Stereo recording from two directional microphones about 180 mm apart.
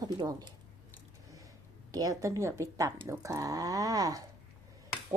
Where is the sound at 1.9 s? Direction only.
20° right (ahead or behind).